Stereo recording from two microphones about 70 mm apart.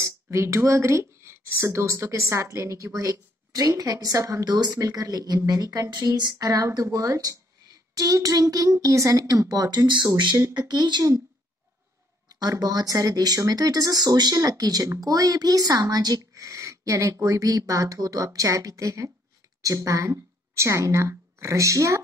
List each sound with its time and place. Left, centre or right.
0.0 s speech: right
6.4 s a woman's voice: right
12.3 s speech: right
14.4 s speech: right